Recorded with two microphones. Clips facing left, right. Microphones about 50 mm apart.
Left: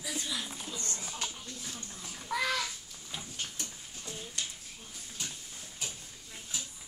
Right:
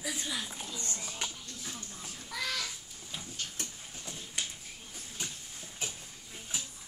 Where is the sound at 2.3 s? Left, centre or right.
Left.